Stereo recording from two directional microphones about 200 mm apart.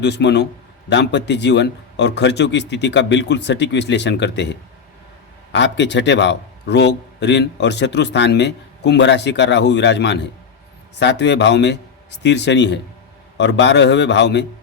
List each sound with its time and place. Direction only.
0.0 s a man's voice: 60° left (ahead or behind)